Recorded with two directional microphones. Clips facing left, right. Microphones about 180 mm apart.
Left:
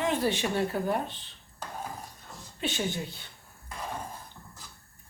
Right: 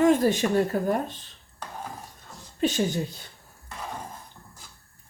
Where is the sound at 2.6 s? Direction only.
40° right (ahead or behind).